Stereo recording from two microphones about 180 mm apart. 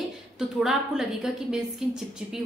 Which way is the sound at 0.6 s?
Centre (ahead or behind).